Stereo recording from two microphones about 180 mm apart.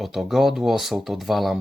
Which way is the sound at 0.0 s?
Centre (ahead or behind).